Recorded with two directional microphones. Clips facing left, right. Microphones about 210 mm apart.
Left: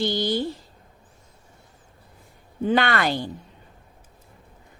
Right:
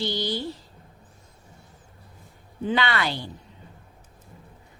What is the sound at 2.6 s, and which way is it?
Speech, 50° left (ahead or behind).